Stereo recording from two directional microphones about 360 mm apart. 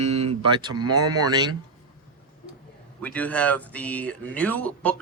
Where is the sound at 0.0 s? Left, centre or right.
Centre.